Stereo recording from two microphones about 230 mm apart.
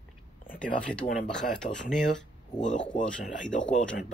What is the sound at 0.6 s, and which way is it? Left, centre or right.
Speech, centre.